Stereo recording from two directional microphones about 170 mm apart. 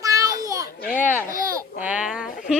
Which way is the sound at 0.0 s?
20° right (ahead or behind).